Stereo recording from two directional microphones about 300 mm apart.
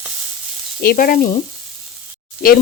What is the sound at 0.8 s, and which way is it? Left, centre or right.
Sizzle, left.